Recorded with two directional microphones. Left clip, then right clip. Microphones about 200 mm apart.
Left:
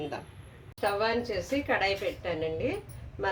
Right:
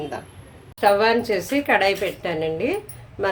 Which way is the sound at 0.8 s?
30° right (ahead or behind).